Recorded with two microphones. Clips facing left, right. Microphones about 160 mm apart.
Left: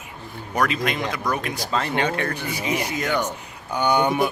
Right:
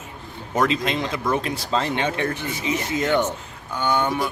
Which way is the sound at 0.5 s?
25° right (ahead or behind).